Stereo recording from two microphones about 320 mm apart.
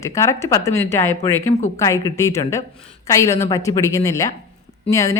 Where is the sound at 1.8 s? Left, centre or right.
Centre.